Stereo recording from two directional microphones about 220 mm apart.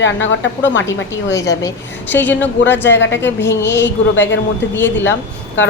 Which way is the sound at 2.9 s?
55° left (ahead or behind).